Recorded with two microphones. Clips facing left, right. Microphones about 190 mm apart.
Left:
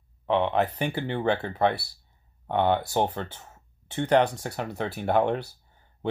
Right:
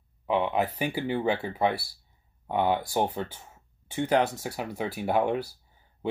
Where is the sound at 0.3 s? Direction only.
5° right (ahead or behind).